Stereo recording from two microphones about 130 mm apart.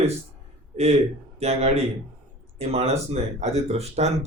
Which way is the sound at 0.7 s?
60° right (ahead or behind).